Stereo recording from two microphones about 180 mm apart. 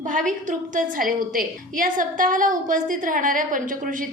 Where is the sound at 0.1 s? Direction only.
45° right (ahead or behind).